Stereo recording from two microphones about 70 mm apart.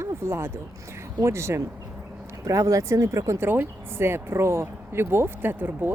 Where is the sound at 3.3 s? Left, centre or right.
Right.